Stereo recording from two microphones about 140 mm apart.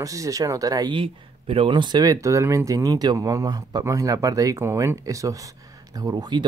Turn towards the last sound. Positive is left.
turn(degrees=-30)  # may be behind; listen again after turning